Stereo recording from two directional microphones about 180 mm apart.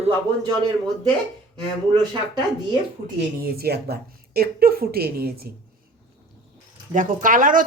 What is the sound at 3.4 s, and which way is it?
A woman's voice, 60° right (ahead or behind).